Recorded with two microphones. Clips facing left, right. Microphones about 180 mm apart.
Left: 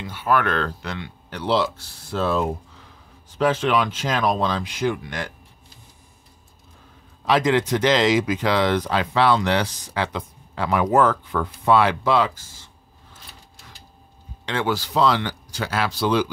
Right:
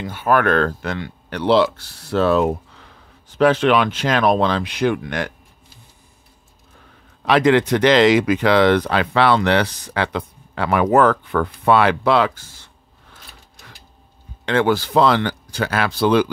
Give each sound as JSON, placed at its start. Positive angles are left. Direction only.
{"t": 0.0, "sound": "speech", "side_deg": -50}
{"t": 7.2, "sound": "speech", "side_deg": -65}
{"t": 14.4, "sound": "speech", "side_deg": -55}